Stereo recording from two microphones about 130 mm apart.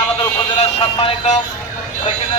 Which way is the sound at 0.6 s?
55° left (ahead or behind).